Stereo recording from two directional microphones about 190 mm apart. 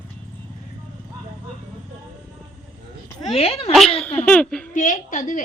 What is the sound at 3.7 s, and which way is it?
Speech, centre (ahead or behind).